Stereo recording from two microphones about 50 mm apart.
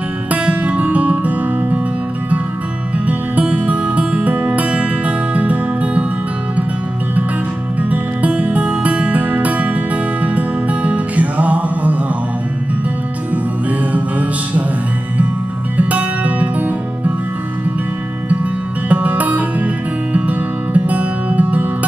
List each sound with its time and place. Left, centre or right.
0.3 s music: right
3.1 s music: right
7.9 s music: right
13.3 s music: right
15.8 s music: right
18.3 s music: right